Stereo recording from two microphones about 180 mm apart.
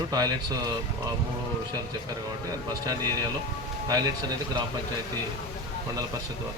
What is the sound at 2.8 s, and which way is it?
Speech, 20° right (ahead or behind).